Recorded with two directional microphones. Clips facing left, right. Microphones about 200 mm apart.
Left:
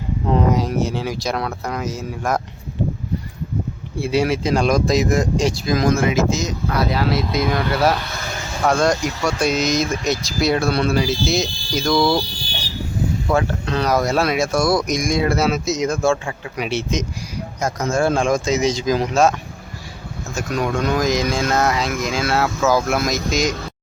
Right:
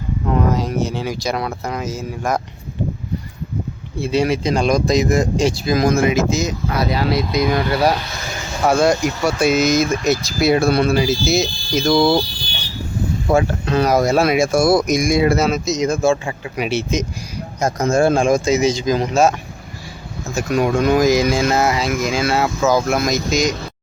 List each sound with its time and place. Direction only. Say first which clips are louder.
0.5 s speech: even; centre (ahead or behind)
3.9 s speech: right 1 dB; 10° left (ahead or behind)
8.6 s speech: right 3 dB; 5° right (ahead or behind)
11.9 s speech: right 3 dB; 25° right (ahead or behind)
13.3 s speech: right 5 dB; 10° right (ahead or behind)
17.6 s speech: right 4 dB; 35° right (ahead or behind)
18.3 s speech: right 3 dB; 10° right (ahead or behind)
20.3 s speech: right 5 dB; 10° right (ahead or behind)